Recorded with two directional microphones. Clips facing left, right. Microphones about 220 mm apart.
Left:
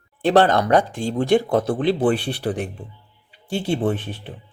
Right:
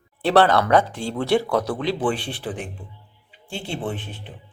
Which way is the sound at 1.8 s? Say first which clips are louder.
Left 5 dB; 55° left (ahead or behind).